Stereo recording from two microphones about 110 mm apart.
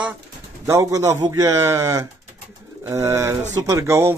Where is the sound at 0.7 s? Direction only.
25° right (ahead or behind).